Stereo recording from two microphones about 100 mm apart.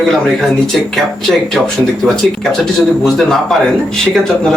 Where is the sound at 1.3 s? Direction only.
10° right (ahead or behind).